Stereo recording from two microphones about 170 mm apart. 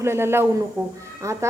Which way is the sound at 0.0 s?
15° right (ahead or behind).